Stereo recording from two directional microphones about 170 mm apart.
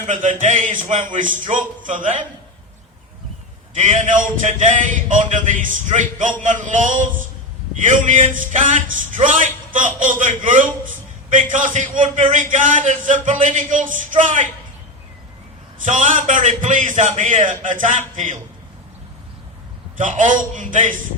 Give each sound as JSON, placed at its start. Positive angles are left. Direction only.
{"t": 0.1, "sound": "a man's voice", "side_deg": -50}
{"t": 3.8, "sound": "a man's voice", "side_deg": -45}
{"t": 8.1, "sound": "a man's voice", "side_deg": -50}
{"t": 15.8, "sound": "a man's voice", "side_deg": -50}
{"t": 20.0, "sound": "a man's voice", "side_deg": -50}